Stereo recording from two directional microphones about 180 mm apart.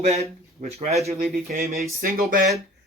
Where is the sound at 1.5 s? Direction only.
55° right (ahead or behind).